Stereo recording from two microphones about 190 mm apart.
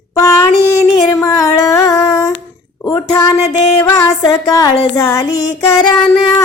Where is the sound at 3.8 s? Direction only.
15° left (ahead or behind).